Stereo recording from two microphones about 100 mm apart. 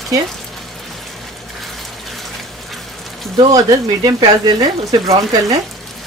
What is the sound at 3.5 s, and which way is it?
Speech, 40° right (ahead or behind).